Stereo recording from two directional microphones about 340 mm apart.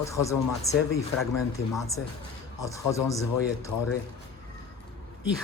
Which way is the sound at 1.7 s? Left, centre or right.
Centre.